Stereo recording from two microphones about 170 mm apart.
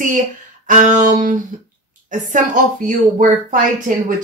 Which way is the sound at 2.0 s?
50° right (ahead or behind).